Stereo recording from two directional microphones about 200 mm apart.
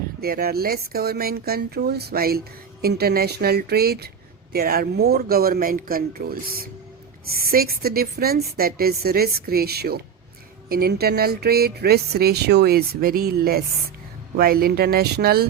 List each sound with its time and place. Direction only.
0.2 s speech: 50° right (ahead or behind)